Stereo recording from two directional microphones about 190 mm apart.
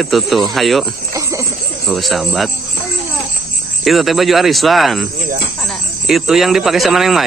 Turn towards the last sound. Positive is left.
turn(degrees=0)  # may be behind; listen again after turning